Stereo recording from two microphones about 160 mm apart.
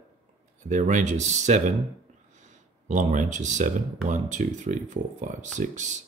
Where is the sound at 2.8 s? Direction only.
50° right (ahead or behind).